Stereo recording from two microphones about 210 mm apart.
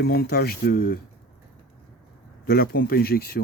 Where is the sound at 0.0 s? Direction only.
50° left (ahead or behind).